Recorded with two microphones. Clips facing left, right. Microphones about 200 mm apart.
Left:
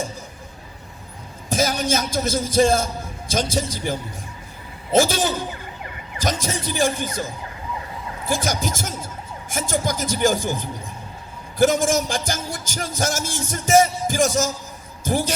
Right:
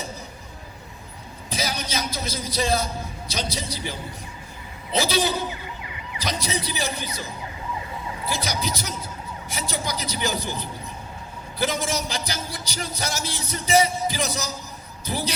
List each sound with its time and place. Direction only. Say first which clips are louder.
1.5 s a man's voice: left 8 dB; 50° left (ahead or behind)